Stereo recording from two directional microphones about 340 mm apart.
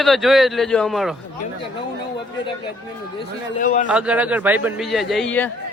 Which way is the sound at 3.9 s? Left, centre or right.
Centre.